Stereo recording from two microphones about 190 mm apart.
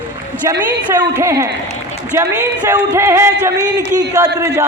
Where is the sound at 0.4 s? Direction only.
15° right (ahead or behind).